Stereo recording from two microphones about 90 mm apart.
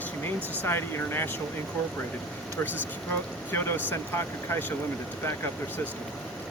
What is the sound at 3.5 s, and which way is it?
Speech, 25° left (ahead or behind).